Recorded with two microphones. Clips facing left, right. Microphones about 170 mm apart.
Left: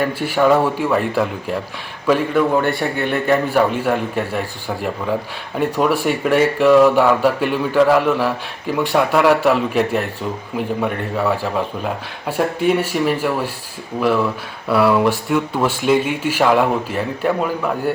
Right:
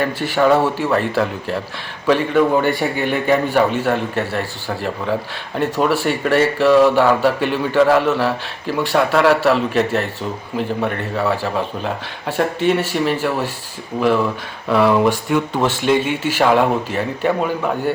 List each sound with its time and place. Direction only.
0.0 s a man's voice: 5° left (ahead or behind)
12.4 s a man's voice: 5° left (ahead or behind)